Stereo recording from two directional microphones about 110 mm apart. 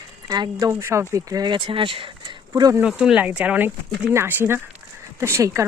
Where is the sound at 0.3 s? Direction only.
40° right (ahead or behind).